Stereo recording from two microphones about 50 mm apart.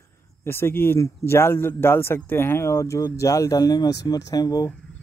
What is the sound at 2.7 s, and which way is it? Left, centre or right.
Speech, left.